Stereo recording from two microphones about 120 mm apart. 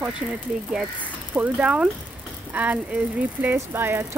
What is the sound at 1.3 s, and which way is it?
Speech, 10° right (ahead or behind).